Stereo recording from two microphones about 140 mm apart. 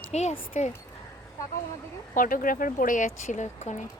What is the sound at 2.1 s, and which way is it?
Speech, 75° left (ahead or behind).